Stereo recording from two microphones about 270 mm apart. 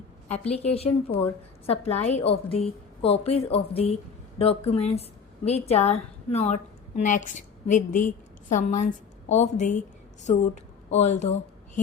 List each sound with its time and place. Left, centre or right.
0.4 s a woman's voice: left